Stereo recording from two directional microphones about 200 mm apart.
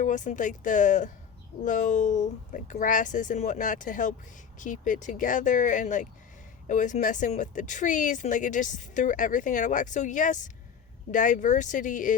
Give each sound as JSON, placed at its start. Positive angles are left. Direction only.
{"t": 0.0, "sound": "speech", "side_deg": 40}